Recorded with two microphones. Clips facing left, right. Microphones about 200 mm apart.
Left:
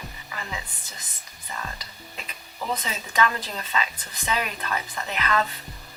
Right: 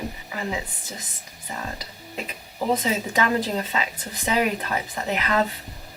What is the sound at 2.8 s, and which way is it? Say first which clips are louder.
A woman's voice: right 2 dB; 10° right (ahead or behind).